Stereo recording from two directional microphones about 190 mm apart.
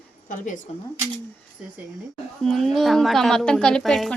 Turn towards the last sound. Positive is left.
turn(degrees=0)  # may be behind; listen again after turning